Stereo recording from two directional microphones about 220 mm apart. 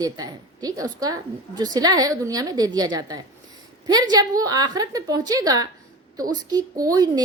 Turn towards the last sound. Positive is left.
turn(degrees=-15)  # may be behind; listen again after turning